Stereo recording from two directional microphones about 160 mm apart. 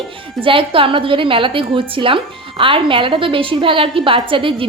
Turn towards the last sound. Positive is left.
turn(degrees=-35)  # may be behind; listen again after turning